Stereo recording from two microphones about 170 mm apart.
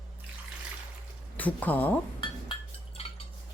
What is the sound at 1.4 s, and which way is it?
Speech, 10° left (ahead or behind).